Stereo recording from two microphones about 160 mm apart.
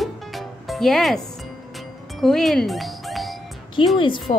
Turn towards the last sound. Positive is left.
turn(degrees=30)  # may be behind; listen again after turning